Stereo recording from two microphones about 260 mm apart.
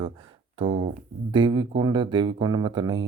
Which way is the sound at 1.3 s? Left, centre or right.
Centre.